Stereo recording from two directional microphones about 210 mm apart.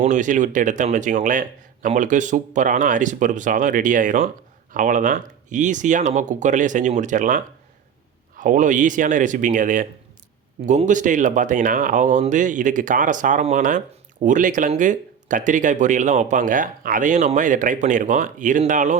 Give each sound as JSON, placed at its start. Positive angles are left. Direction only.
{"t": 0.0, "sound": "speech", "side_deg": -35}